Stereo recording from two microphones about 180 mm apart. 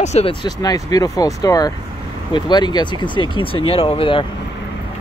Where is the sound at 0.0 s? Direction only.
35° left (ahead or behind).